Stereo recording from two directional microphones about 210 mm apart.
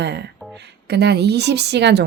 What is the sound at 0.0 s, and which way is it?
A woman's voice, 55° right (ahead or behind).